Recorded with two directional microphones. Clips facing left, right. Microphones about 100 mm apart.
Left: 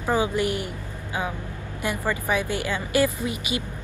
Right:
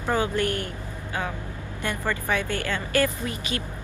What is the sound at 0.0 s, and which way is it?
A woman's voice, 10° left (ahead or behind).